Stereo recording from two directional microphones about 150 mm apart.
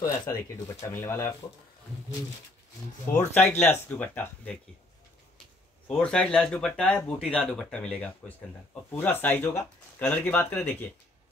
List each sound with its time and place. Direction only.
0.3 s speech: 20° left (ahead or behind)
3.2 s speech: 15° left (ahead or behind)
5.9 s speech: 10° left (ahead or behind)